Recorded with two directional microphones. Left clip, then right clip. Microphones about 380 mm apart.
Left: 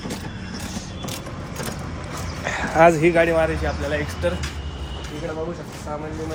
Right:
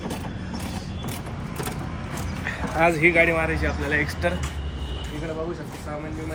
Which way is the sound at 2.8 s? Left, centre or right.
Centre.